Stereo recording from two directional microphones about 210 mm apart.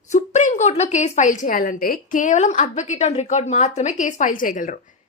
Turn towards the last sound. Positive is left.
turn(degrees=40)  # may be behind; listen again after turning